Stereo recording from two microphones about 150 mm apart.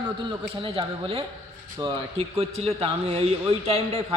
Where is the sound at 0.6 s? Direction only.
35° right (ahead or behind).